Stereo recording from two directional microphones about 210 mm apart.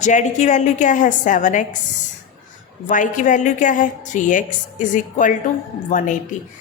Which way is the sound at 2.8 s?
35° left (ahead or behind).